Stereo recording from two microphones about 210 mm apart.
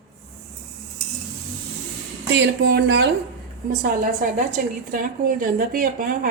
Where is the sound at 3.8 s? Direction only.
40° right (ahead or behind).